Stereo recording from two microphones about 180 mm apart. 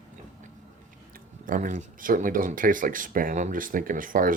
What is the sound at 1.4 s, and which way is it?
Speech, 45° right (ahead or behind).